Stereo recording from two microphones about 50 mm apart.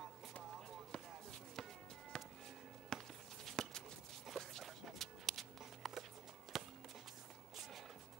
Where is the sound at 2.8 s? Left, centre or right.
Centre.